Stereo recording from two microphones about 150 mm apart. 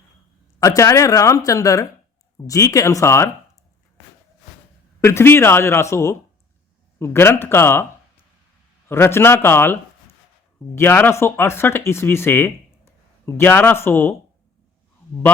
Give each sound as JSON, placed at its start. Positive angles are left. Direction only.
{"t": 0.6, "sound": "a woman's voice", "side_deg": 20}
{"t": 4.9, "sound": "speech", "side_deg": 15}
{"t": 8.9, "sound": "speech", "side_deg": 15}
{"t": 10.8, "sound": "speech", "side_deg": 15}